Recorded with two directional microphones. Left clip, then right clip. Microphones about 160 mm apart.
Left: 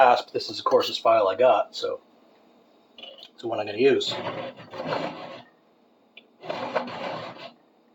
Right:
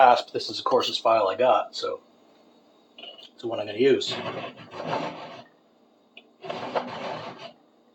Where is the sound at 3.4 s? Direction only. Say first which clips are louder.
Left 1 dB; 15° left (ahead or behind).